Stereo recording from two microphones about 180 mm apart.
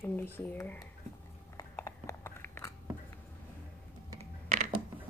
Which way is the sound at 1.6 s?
15° left (ahead or behind).